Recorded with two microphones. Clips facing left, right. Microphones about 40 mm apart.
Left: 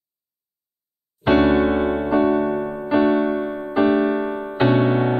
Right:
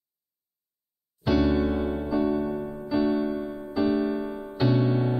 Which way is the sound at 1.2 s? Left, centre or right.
Left.